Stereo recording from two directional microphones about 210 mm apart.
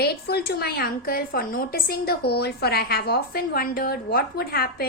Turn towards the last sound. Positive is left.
turn(degrees=45)  # may be behind; listen again after turning